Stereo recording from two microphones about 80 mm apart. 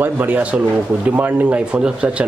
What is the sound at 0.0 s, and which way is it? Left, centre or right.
Speech, right.